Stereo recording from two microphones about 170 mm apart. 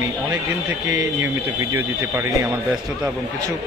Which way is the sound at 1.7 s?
15° right (ahead or behind).